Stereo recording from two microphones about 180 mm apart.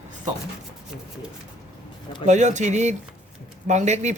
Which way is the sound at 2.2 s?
40° right (ahead or behind).